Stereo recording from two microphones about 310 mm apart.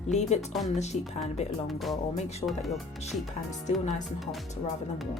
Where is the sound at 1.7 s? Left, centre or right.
Centre.